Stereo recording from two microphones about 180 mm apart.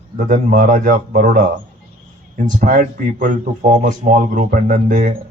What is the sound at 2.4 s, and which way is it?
Speech, 45° right (ahead or behind).